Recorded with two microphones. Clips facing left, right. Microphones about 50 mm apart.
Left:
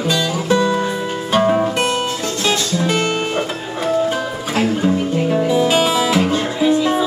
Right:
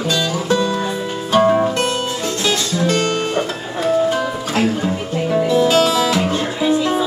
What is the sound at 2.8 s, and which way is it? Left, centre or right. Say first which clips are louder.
Music: right 2 dB; centre.